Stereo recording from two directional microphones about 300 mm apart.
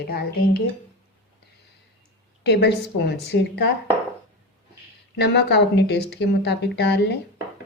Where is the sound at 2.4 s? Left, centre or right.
Left.